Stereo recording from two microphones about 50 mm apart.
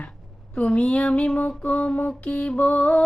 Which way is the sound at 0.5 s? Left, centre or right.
Left.